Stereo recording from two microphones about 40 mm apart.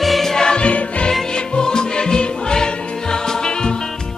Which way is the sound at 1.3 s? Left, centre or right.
Centre.